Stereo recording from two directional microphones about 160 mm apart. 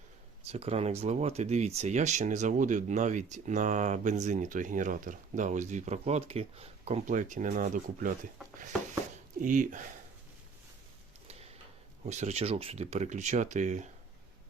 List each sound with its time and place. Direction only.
0.4 s speech: 40° right (ahead or behind)
9.4 s speech: 55° right (ahead or behind)
12.0 s speech: 45° right (ahead or behind)